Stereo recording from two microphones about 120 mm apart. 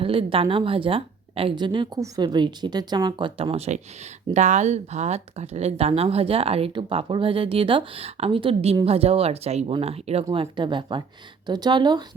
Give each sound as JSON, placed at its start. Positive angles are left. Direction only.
{"t": 0.0, "sound": "a woman's voice", "side_deg": -50}
{"t": 4.4, "sound": "speech", "side_deg": -80}
{"t": 10.3, "sound": "a woman's voice", "side_deg": -45}